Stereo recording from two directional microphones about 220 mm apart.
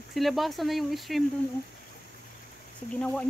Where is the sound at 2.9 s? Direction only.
5° left (ahead or behind).